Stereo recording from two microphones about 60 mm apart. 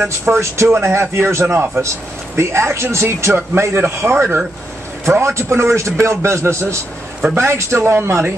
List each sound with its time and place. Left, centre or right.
0.0 s speech: right
0.4 s speech: right
0.7 s speech: right